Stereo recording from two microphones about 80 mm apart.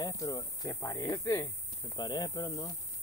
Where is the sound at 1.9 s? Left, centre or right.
Left.